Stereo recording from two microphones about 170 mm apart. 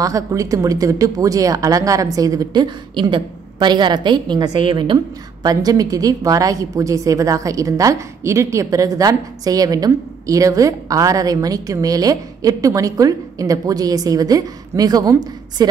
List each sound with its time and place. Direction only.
0.0 s a woman's voice: 20° right (ahead or behind)